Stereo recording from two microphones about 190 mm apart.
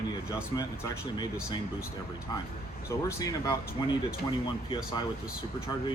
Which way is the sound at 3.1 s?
15° left (ahead or behind).